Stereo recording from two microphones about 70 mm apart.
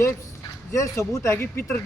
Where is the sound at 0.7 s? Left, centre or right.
Left.